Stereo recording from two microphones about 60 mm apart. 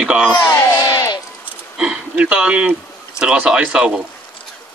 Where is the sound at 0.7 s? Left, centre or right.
Left.